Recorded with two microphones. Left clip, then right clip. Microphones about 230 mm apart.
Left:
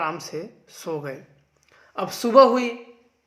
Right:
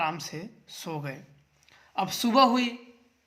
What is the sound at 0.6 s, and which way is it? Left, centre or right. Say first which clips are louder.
Speech: right 1 dB; right.